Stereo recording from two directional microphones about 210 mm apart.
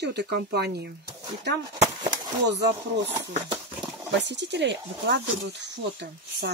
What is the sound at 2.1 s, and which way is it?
Speech, 55° right (ahead or behind).